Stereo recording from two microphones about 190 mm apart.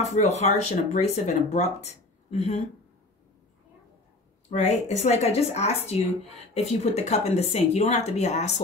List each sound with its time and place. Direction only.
0.0 s speech: 35° left (ahead or behind)
4.5 s speech: 35° left (ahead or behind)